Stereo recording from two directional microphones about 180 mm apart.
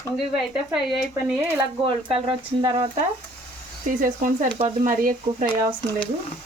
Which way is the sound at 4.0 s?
45° right (ahead or behind).